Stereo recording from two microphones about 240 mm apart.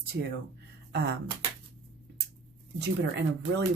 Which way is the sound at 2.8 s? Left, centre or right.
Right.